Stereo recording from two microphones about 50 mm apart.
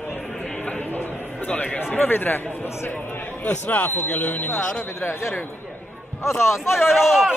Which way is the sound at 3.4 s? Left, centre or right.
Left.